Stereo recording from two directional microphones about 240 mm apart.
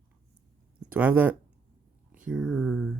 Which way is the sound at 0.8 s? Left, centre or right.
Centre.